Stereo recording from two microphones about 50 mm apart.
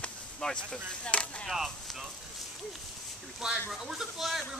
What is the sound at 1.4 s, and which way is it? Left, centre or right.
Chop, centre.